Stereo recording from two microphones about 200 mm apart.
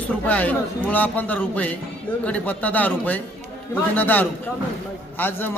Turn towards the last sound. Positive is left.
turn(degrees=10)  # may be behind; listen again after turning